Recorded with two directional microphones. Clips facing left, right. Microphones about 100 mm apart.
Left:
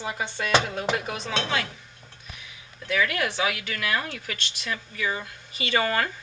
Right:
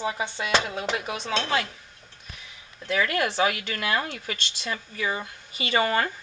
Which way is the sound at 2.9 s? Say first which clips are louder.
Right 1 dB; 35° right (ahead or behind).